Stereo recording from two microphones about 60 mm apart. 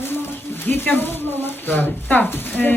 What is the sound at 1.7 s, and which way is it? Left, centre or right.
Speech, left.